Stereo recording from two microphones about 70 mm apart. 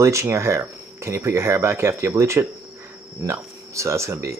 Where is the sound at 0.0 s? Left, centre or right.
Right.